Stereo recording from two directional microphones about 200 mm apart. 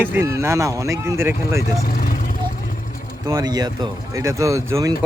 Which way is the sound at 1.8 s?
45° left (ahead or behind).